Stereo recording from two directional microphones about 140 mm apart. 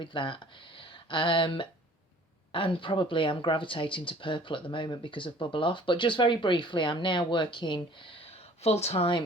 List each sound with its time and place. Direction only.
0.0 s speech: 35° left (ahead or behind)